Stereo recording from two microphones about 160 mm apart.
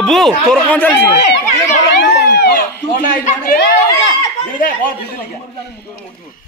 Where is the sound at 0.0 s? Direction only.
Centre (ahead or behind).